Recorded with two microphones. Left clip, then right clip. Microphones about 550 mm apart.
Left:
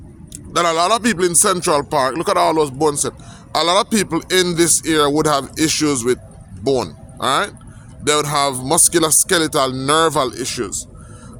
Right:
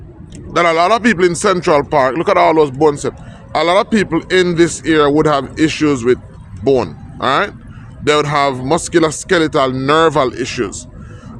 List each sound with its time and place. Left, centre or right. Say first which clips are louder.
0.5 s a man's voice: right 4 dB; left